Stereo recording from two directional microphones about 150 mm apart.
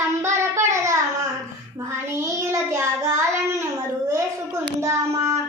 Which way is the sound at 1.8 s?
20° right (ahead or behind).